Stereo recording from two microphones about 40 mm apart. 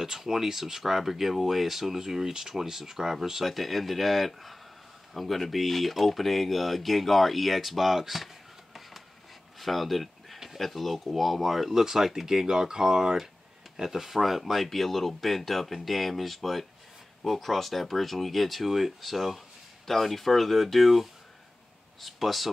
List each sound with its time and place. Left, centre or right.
0.0 s speech: centre
3.4 s speech: centre
9.6 s a sound: centre
10.6 s speech: centre
11.7 s speech: centre